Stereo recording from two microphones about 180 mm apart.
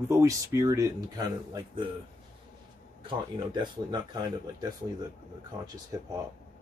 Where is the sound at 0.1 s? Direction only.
15° right (ahead or behind).